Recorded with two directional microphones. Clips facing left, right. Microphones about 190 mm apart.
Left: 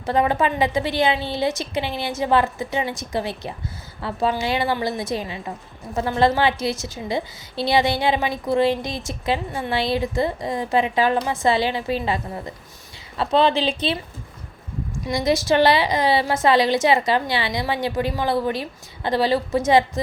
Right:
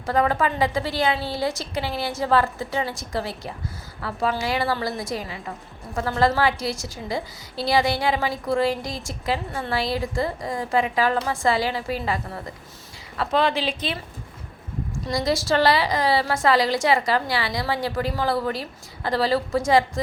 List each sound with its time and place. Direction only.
0.0 s a woman's voice: 20° left (ahead or behind)
15.0 s a woman's voice: 20° left (ahead or behind)